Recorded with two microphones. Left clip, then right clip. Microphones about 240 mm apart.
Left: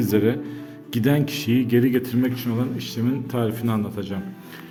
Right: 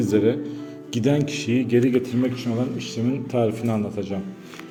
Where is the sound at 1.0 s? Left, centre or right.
Left.